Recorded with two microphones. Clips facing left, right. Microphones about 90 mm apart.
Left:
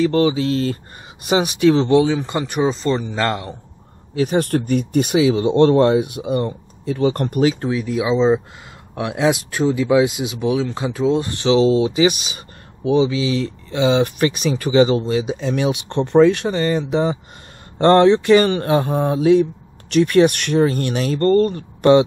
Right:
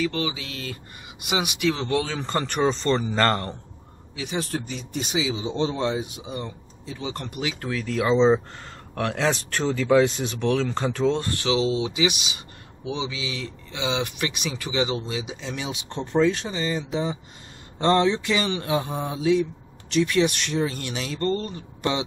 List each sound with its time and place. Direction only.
0.0 s speech: 35° left (ahead or behind)
2.1 s speech: 10° left (ahead or behind)
4.1 s speech: 45° left (ahead or behind)
7.6 s speech: 15° left (ahead or behind)
8.1 s speech: 5° left (ahead or behind)
11.2 s speech: 25° left (ahead or behind)
11.5 s speech: 40° left (ahead or behind); by 22.0 s 55° left (ahead or behind)